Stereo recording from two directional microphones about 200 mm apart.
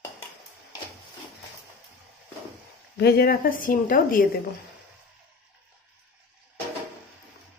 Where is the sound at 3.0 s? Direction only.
50° left (ahead or behind).